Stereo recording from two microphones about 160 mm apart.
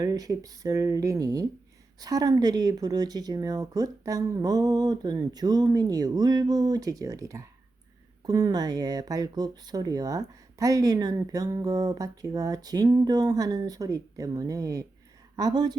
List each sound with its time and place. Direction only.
0.0 s speech: 25° right (ahead or behind)